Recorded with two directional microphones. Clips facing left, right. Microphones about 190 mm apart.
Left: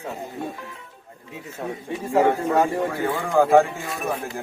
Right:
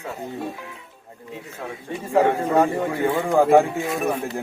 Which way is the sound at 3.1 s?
20° right (ahead or behind).